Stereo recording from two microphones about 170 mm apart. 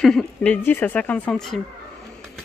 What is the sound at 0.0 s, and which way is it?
Speech, centre (ahead or behind).